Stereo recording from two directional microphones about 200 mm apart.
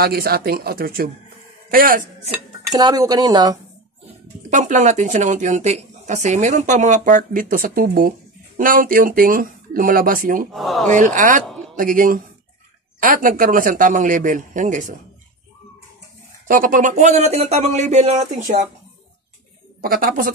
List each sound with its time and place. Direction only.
0.0 s speech: 50° right (ahead or behind)
2.7 s speech: 20° right (ahead or behind)
4.5 s speech: 40° right (ahead or behind)
10.5 s speech: centre (ahead or behind)
10.9 s speech: 40° right (ahead or behind)
16.4 s speech: 45° right (ahead or behind)
19.8 s speech: 45° right (ahead or behind)